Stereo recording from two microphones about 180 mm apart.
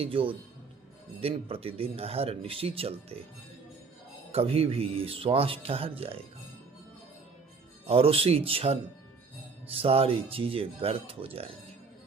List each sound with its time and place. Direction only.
0.0 s speech: 30° right (ahead or behind)
4.3 s speech: 35° right (ahead or behind)
7.9 s speech: 30° right (ahead or behind)